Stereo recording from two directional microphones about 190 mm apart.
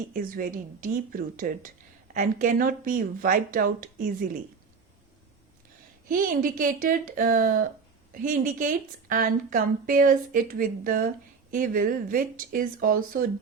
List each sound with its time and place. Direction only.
0.1 s a woman's voice: 50° right (ahead or behind)
6.1 s a woman's voice: 45° right (ahead or behind)